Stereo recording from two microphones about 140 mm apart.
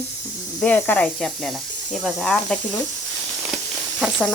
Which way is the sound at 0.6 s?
10° left (ahead or behind).